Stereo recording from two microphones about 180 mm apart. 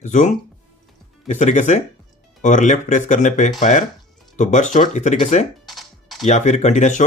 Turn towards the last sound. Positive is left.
turn(degrees=40)  # may be behind; listen again after turning